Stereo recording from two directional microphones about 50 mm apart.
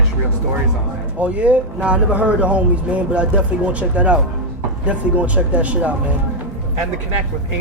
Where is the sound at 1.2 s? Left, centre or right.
Right.